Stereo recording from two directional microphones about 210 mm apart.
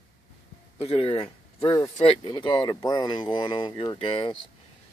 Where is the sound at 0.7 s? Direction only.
25° left (ahead or behind).